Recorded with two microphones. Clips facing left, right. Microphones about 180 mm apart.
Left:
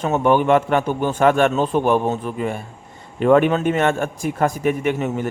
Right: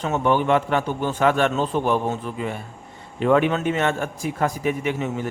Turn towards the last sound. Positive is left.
turn(degrees=55)  # may be behind; listen again after turning